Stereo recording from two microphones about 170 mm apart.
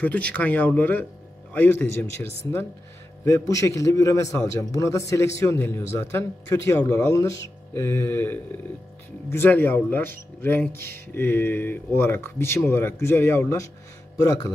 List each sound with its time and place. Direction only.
0.0 s a man's voice: 10° left (ahead or behind)
3.3 s a man's voice: 15° left (ahead or behind)